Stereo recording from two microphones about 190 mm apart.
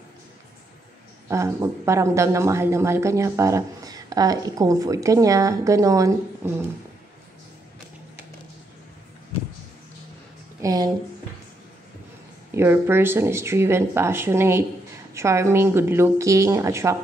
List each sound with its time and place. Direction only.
1.3 s speech: 15° right (ahead or behind)
10.6 s a woman's voice: 20° right (ahead or behind)
12.5 s speech: 10° right (ahead or behind)